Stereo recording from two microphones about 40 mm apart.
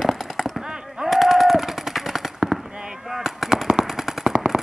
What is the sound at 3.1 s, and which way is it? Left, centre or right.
Machine gun, centre.